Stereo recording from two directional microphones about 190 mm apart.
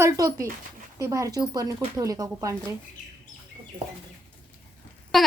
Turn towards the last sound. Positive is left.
turn(degrees=0)  # may be behind; listen again after turning